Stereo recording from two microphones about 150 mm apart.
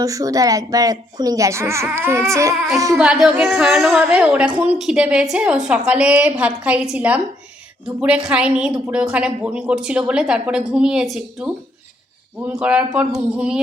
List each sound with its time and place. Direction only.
0.0 s speech: 20° right (ahead or behind)
2.9 s a woman's voice: 5° right (ahead or behind)